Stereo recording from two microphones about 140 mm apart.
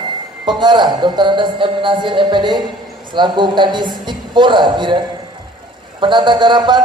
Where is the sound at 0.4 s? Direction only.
35° right (ahead or behind).